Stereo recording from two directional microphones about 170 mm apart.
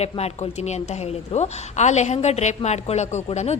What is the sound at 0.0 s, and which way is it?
A woman's voice, 40° left (ahead or behind).